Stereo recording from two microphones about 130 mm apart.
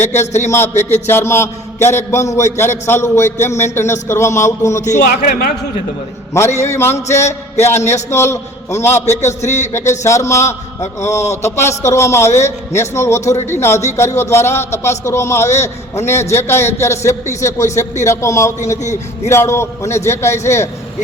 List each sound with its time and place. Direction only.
0.0 s a man's voice: 60° left (ahead or behind)
0.3 s a man's voice: 20° left (ahead or behind)
4.8 s a man's voice: 70° left (ahead or behind)
6.3 s a man's voice: 20° left (ahead or behind)
6.7 s a sound: 20° left (ahead or behind)
6.9 s a man's voice: 60° left (ahead or behind)
7.5 s a man's voice: 20° left (ahead or behind)
9.0 s a man's voice: 60° left (ahead or behind)
10.0 s a man's voice: 20° left (ahead or behind)
13.3 s a man's voice: 60° left (ahead or behind)
13.6 s a man's voice: 20° left (ahead or behind)
18.8 s a man's voice: 65° left (ahead or behind)
19.3 s a man's voice: 20° left (ahead or behind)